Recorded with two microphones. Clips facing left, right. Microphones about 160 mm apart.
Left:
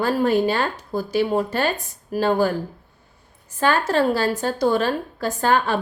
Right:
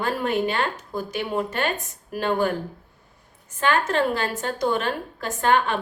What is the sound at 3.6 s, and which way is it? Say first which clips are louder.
Speech: left 3 dB; 35° left (ahead or behind).